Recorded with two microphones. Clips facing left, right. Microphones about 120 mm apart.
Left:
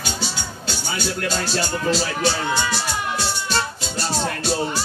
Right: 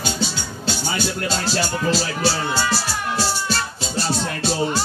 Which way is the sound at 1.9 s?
5° right (ahead or behind).